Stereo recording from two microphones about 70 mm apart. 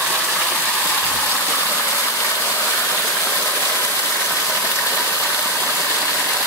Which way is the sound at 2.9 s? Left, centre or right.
Centre.